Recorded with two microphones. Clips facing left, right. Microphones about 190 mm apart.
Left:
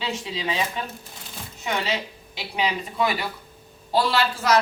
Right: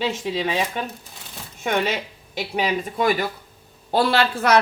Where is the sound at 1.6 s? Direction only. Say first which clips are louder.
Right 4 dB; 55° right (ahead or behind).